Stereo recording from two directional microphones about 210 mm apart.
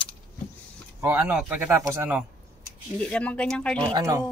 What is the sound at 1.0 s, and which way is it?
Speech, 10° right (ahead or behind).